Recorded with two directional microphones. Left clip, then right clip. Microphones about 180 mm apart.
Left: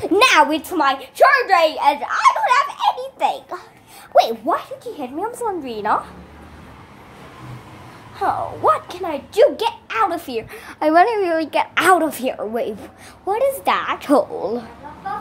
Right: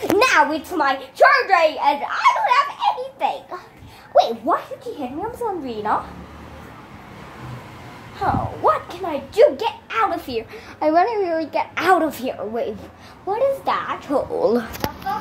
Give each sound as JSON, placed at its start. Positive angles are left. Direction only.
{"t": 0.2, "sound": "a sound", "side_deg": 60}
{"t": 0.7, "sound": "a child's voice", "side_deg": 25}
{"t": 2.0, "sound": "baby laughter", "side_deg": 25}
{"t": 4.1, "sound": "a child's voice", "side_deg": 20}
{"t": 8.2, "sound": "a child's voice", "side_deg": 20}
{"t": 9.6, "sound": "a woman's voice", "side_deg": 35}
{"t": 13.9, "sound": "speech", "side_deg": 55}
{"t": 14.4, "sound": "speech", "side_deg": -10}